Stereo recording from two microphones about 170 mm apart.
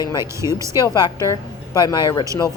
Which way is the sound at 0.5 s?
20° right (ahead or behind).